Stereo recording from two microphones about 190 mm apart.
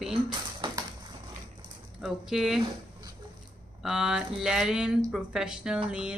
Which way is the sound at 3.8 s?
5° right (ahead or behind).